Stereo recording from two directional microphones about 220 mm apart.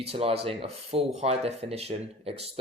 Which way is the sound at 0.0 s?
25° right (ahead or behind).